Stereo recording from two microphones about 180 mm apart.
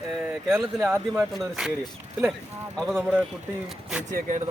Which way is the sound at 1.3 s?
Centre (ahead or behind).